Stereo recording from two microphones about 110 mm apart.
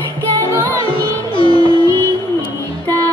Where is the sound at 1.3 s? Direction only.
50° left (ahead or behind).